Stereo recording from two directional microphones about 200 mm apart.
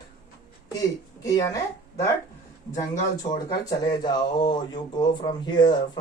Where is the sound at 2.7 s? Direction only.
20° left (ahead or behind).